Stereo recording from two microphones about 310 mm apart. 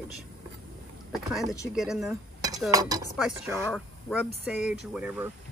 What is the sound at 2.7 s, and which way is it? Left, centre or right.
Dishes, centre.